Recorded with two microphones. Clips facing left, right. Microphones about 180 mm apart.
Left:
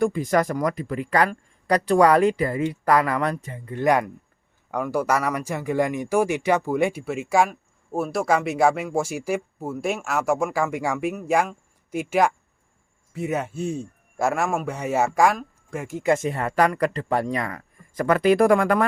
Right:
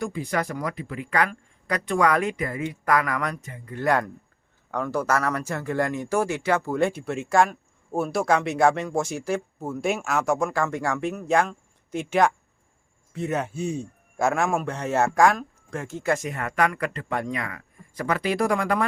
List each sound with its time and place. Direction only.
0.0 s speech: 45° left (ahead or behind); by 3.8 s 25° left (ahead or behind)
3.8 s a man's voice: 15° left (ahead or behind); by 18.9 s 50° left (ahead or behind)